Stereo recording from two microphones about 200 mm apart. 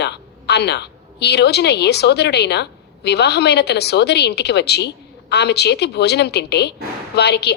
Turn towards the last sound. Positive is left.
turn(degrees=55)  # may be behind; listen again after turning